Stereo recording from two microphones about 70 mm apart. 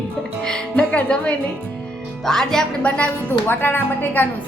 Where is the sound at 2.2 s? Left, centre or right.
Centre.